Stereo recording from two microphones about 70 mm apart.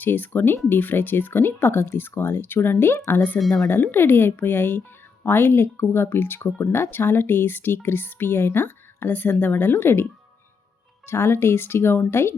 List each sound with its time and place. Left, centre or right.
0.0 s speech: left